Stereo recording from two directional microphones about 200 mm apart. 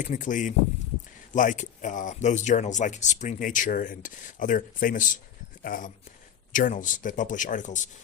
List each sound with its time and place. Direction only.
0.0 s speech: 40° left (ahead or behind)